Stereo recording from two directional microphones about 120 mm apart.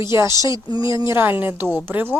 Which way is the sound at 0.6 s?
40° left (ahead or behind).